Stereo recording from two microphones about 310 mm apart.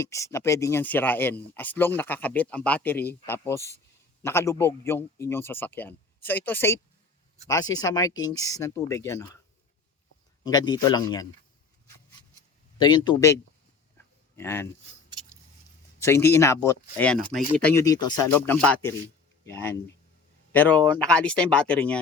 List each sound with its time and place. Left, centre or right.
0.0 s speech: centre
10.4 s speech: centre
13.1 s speech: centre
16.0 s speech: centre